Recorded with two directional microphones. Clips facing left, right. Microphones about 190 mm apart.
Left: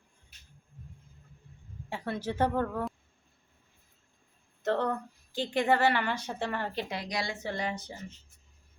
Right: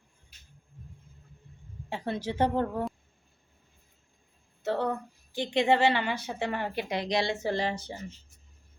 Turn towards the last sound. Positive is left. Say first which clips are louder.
# right 5 dB
turn(degrees=-30)  # may be behind; listen again after turning